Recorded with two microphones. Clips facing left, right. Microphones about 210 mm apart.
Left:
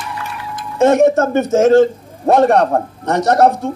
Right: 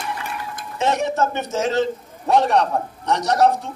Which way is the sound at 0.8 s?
50° left (ahead or behind).